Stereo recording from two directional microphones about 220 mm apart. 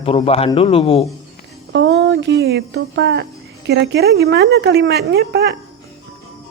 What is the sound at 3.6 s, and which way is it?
Speech, 50° right (ahead or behind).